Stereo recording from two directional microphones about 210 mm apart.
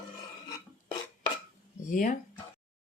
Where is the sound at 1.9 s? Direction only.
40° left (ahead or behind).